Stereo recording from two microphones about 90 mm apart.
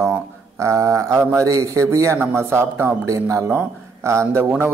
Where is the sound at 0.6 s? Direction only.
35° right (ahead or behind).